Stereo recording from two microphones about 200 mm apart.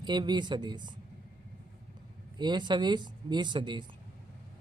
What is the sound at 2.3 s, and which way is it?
Speech, 20° right (ahead or behind).